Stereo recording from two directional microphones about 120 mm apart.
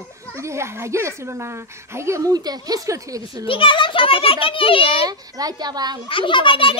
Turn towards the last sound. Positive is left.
turn(degrees=45)  # may be behind; listen again after turning